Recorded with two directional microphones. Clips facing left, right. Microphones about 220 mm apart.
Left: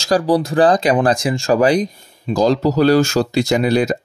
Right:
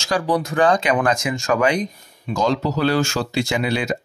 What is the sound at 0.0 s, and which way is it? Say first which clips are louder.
Speech: left 5 dB; 35° left (ahead or behind).